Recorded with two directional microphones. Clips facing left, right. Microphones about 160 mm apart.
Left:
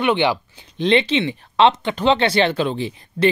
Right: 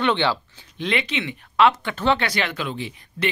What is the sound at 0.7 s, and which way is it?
Speech, 30° left (ahead or behind).